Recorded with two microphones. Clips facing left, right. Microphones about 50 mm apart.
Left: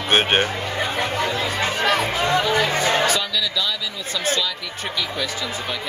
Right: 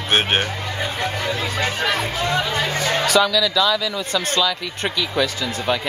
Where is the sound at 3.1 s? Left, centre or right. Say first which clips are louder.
Right 7 dB; right.